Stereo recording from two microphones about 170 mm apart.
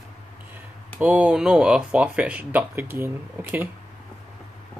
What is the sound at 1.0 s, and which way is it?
Speech, 10° right (ahead or behind).